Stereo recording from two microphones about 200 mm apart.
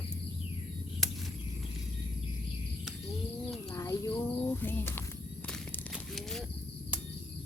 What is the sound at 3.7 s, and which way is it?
Speech, 15° left (ahead or behind).